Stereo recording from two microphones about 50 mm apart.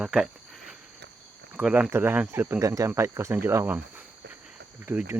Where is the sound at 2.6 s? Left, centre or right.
Right.